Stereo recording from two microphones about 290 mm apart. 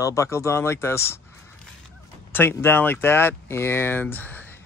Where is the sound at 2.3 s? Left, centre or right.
Centre.